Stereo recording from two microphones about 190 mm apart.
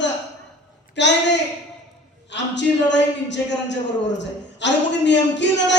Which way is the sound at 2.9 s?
70° left (ahead or behind).